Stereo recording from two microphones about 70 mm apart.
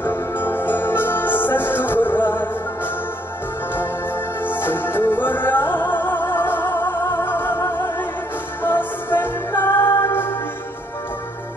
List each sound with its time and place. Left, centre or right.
0.0 s music: left
4.5 s music: left